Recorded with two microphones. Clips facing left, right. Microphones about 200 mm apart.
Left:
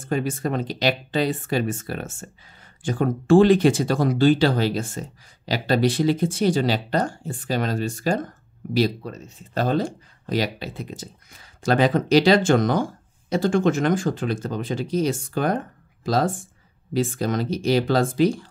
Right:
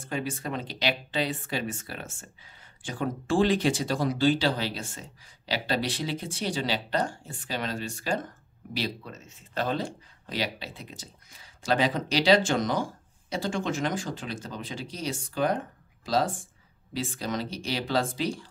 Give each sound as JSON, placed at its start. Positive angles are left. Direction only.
{"t": 0.1, "sound": "speech", "side_deg": 45}